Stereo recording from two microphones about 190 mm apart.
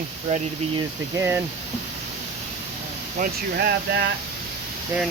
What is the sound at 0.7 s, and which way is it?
Speech, 15° right (ahead or behind).